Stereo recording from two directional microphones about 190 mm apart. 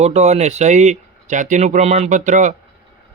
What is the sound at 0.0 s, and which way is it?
Speech, 35° right (ahead or behind).